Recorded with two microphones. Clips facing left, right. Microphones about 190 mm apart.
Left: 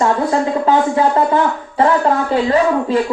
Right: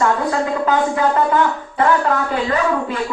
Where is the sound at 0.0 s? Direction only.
30° left (ahead or behind).